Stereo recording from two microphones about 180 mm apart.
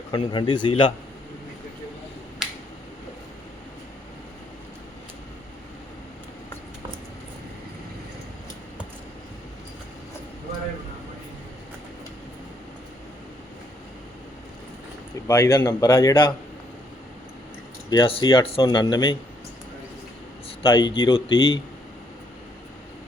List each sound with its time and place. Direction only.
0.1 s speech: 25° left (ahead or behind)
2.4 s finger snapping: centre (ahead or behind)
15.3 s speech: 20° left (ahead or behind)
17.8 s speech: 25° left (ahead or behind)
20.7 s speech: 25° left (ahead or behind)